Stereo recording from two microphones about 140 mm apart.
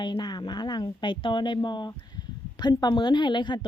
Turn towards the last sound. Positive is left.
turn(degrees=35)  # may be behind; listen again after turning